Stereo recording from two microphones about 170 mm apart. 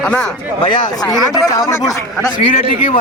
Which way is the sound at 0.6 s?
25° left (ahead or behind).